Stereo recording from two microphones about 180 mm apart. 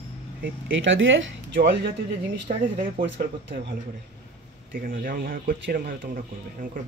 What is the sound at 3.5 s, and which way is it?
Speech, 70° right (ahead or behind).